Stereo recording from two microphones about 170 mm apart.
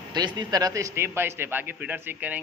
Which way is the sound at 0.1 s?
25° right (ahead or behind).